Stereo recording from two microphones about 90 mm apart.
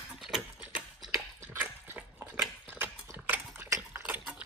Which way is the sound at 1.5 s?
20° right (ahead or behind).